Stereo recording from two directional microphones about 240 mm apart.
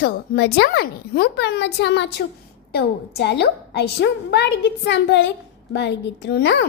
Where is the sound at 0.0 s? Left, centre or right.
Left.